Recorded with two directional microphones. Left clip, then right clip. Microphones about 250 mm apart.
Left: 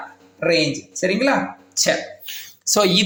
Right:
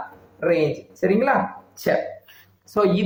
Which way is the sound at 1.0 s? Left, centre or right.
Left.